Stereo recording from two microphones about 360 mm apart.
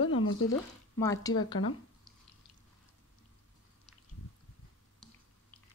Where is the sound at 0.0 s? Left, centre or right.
Left.